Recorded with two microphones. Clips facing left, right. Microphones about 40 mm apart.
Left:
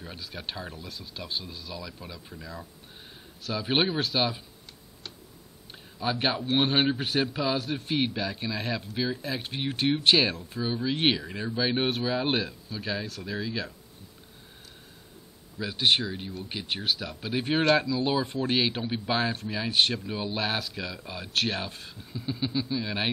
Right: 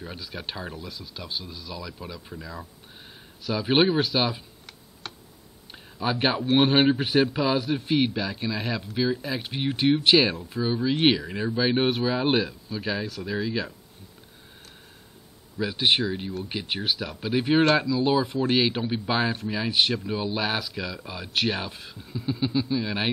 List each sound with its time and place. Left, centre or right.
0.4 s a man's voice: centre
5.7 s a sound: centre
6.1 s a man's voice: centre
6.4 s a man's voice: right
6.8 s a man's voice: centre
10.3 s a man's voice: right
10.6 s a man's voice: centre
15.5 s a man's voice: centre
17.8 s a man's voice: centre
21.3 s a man's voice: centre